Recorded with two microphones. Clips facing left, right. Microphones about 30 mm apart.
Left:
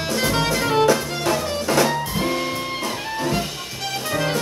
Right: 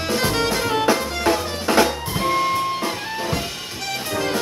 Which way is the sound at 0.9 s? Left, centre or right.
Right.